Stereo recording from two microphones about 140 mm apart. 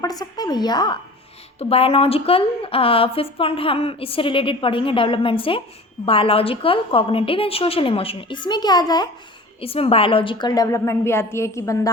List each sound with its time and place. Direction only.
0.0 s a woman's voice: 25° left (ahead or behind)
1.5 s a woman's voice: 45° left (ahead or behind)
9.6 s a woman's voice: 45° left (ahead or behind); by 11.9 s 20° left (ahead or behind)